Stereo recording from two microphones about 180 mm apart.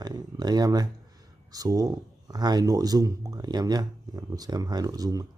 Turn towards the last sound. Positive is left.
turn(degrees=-20)  # may be behind; listen again after turning